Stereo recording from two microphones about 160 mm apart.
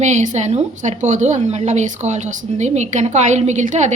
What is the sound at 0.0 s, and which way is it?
A woman's voice, 50° right (ahead or behind).